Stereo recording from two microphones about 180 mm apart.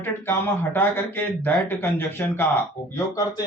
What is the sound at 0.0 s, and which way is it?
Speech, 10° left (ahead or behind).